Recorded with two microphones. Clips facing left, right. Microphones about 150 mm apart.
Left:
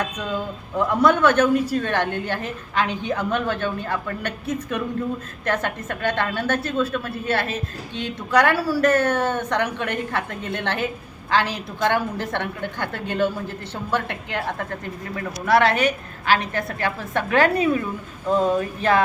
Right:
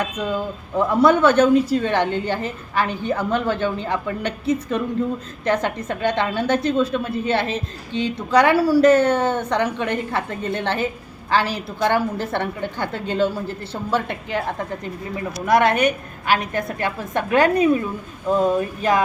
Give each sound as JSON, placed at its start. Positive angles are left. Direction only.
{"t": 0.0, "sound": "a woman's voice", "side_deg": -10}
{"t": 14.3, "sound": "a woman's voice", "side_deg": -15}